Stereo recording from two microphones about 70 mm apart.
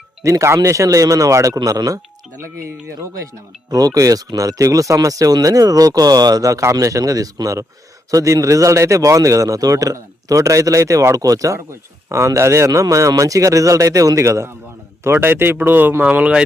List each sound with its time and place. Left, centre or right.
0.2 s a man's voice: right
1.5 s speech: right
3.7 s a man's voice: right
15.0 s speech: right
16.0 s speech: centre